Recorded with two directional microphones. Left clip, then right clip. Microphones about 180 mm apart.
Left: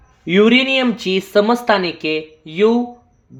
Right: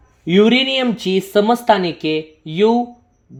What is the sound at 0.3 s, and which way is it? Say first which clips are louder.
Speech: left 1 dB; 20° right (ahead or behind).